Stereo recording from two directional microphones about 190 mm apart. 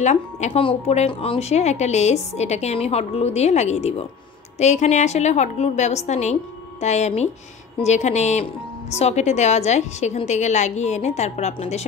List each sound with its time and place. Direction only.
0.0 s speech: 35° left (ahead or behind)